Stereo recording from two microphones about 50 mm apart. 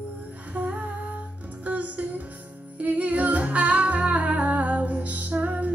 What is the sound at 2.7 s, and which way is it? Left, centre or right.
Humming, right.